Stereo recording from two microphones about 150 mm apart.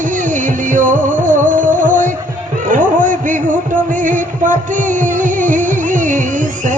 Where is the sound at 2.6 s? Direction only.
60° right (ahead or behind).